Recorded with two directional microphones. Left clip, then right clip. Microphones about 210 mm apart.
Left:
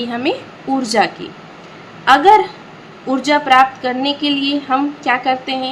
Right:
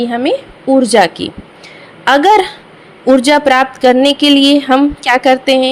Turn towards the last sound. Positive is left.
turn(degrees=-40)  # may be behind; listen again after turning